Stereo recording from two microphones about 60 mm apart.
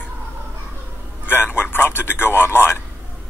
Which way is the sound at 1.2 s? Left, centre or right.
Left.